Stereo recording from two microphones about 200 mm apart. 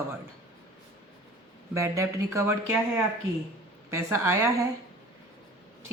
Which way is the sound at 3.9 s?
15° right (ahead or behind).